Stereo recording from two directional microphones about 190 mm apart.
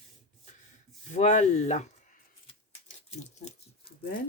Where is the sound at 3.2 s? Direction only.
35° left (ahead or behind).